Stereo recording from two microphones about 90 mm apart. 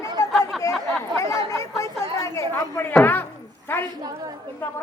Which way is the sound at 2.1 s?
35° left (ahead or behind).